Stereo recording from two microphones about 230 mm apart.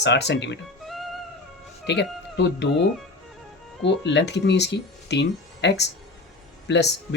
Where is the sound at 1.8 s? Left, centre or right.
Left.